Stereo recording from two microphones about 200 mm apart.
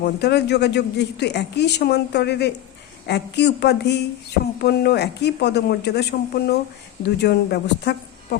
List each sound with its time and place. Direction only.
0.0 s speech: 55° left (ahead or behind)